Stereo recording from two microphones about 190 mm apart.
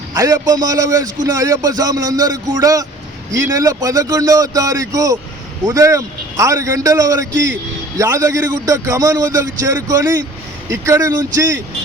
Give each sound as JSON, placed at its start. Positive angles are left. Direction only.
{"t": 0.1, "sound": "a man's voice", "side_deg": -15}